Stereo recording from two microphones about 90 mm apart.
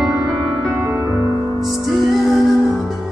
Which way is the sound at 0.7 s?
25° right (ahead or behind).